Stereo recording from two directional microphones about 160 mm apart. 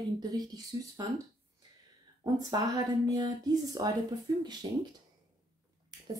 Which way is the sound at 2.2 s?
20° right (ahead or behind).